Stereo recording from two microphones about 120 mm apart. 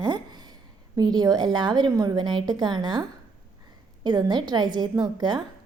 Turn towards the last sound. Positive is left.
turn(degrees=-35)  # may be behind; listen again after turning